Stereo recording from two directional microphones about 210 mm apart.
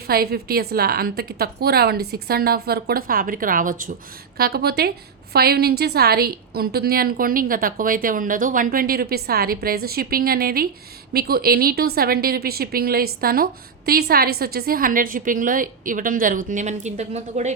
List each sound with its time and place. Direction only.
0.1 s a woman's voice: 45° right (ahead or behind)